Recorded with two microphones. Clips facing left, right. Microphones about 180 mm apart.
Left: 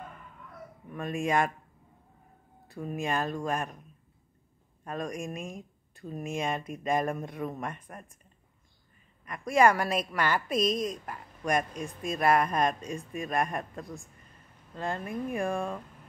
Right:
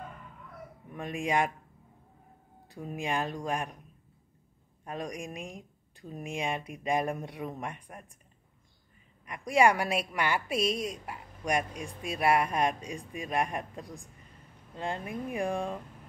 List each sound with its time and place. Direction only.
0.9 s a woman's voice: 15° right (ahead or behind)
2.7 s a woman's voice: 15° right (ahead or behind)
4.8 s a woman's voice: 15° right (ahead or behind)
9.2 s a woman's voice: 15° right (ahead or behind)